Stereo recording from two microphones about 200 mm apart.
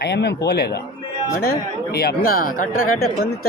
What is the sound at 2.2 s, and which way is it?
Speech, 45° left (ahead or behind).